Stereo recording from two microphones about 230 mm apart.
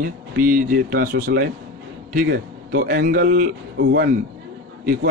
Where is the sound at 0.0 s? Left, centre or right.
Right.